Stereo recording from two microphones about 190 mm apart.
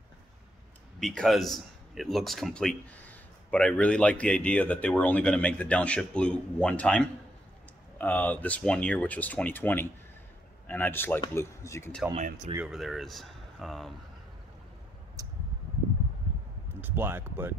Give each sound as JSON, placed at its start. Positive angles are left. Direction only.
{"t": 0.9, "sound": "a man's voice", "side_deg": 0}
{"t": 12.1, "sound": "speech", "side_deg": -40}
{"t": 12.5, "sound": "speech", "side_deg": 0}
{"t": 15.2, "sound": "a sound", "side_deg": -20}
{"t": 16.8, "sound": "speech", "side_deg": -10}